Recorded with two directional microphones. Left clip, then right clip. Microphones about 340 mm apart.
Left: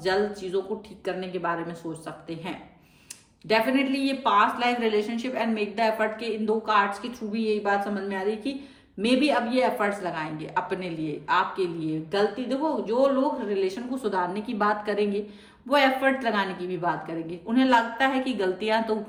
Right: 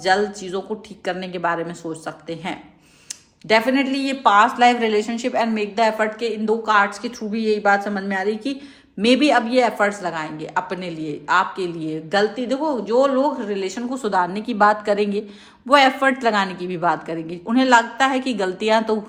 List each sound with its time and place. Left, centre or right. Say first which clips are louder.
0.0 s a woman's voice: right 7 dB; centre